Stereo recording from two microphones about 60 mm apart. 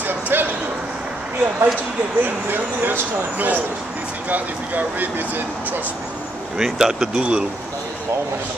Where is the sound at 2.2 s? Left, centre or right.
Right.